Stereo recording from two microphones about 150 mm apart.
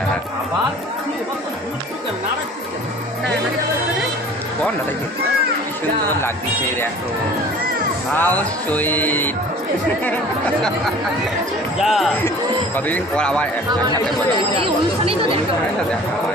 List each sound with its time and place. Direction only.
8.1 s speech: 10° left (ahead or behind)
11.8 s speech: centre (ahead or behind)
14.6 s speech: 40° right (ahead or behind)